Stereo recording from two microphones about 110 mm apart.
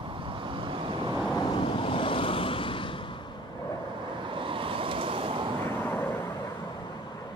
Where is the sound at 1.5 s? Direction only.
50° left (ahead or behind).